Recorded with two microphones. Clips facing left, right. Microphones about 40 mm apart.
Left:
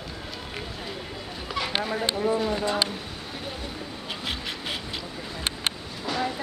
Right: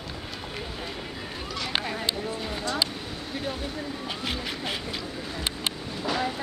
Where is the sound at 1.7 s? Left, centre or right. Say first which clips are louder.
Left 1 dB; centre.